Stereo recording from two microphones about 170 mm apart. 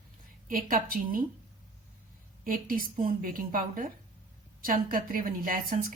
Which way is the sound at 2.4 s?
55° right (ahead or behind).